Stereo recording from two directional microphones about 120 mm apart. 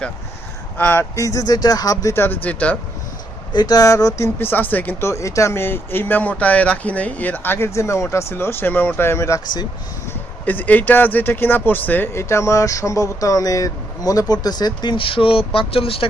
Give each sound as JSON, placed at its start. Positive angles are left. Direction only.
{"t": 0.8, "sound": "speech", "side_deg": 20}
{"t": 2.1, "sound": "speech", "side_deg": 15}
{"t": 3.5, "sound": "speech", "side_deg": 35}